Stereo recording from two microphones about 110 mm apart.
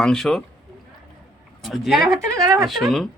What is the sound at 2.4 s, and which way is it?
Speech, 30° right (ahead or behind).